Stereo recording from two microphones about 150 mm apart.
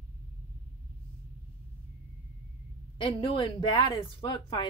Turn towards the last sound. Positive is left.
turn(degrees=30)  # may be behind; listen again after turning